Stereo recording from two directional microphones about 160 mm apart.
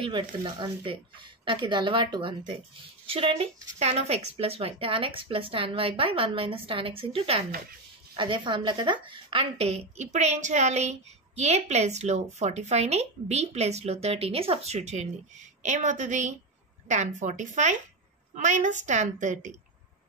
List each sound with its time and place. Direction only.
0.0 s a woman's voice: 30° right (ahead or behind); by 19.5 s 50° right (ahead or behind)